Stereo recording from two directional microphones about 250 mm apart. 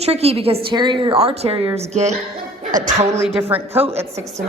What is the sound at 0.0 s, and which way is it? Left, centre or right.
A woman's voice, right.